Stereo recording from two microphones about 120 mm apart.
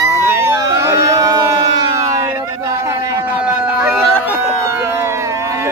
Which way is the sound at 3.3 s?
10° right (ahead or behind).